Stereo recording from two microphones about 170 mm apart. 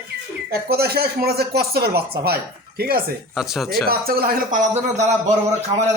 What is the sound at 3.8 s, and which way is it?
Speech, 60° right (ahead or behind).